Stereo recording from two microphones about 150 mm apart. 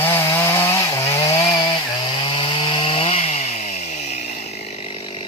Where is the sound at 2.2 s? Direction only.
30° left (ahead or behind).